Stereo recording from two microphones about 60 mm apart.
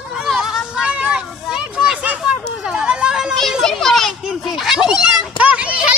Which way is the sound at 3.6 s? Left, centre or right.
Centre.